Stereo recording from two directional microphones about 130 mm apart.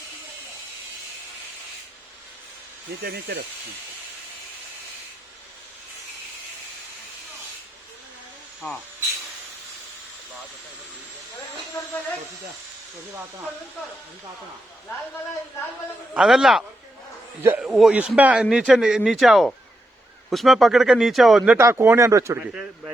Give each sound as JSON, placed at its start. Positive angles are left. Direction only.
{"t": 16.1, "sound": "speech", "side_deg": -5}
{"t": 17.4, "sound": "speech", "side_deg": -15}
{"t": 17.7, "sound": "speech", "side_deg": 0}
{"t": 21.6, "sound": "speech", "side_deg": -20}
{"t": 22.4, "sound": "speech", "side_deg": -10}